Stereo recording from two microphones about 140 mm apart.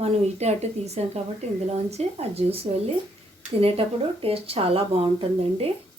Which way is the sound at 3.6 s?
45° right (ahead or behind).